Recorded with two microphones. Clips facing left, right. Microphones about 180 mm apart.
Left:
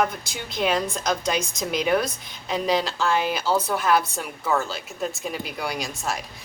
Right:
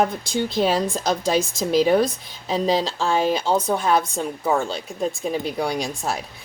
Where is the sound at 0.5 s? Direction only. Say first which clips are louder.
Right 1 dB; 30° right (ahead or behind).